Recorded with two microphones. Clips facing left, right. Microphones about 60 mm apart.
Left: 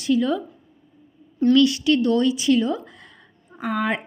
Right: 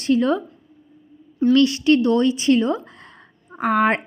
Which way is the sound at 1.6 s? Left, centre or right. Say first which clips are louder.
Right 3 dB; right.